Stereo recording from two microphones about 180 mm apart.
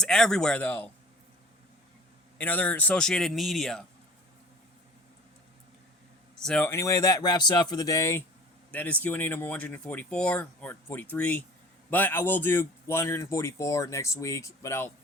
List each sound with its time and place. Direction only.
0.0 s speech: 5° left (ahead or behind)
2.4 s speech: 10° left (ahead or behind)
6.3 s speech: 5° left (ahead or behind)